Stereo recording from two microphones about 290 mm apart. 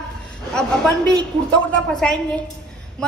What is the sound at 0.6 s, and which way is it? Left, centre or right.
A woman's voice, centre.